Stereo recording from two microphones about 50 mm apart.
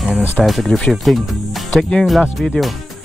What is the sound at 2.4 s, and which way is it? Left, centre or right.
Speech, centre.